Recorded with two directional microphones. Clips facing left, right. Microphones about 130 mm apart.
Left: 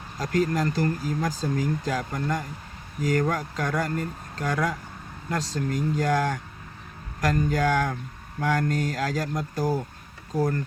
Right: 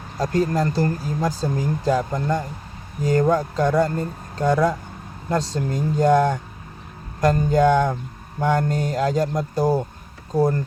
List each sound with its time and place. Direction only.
0.2 s speech: 30° right (ahead or behind)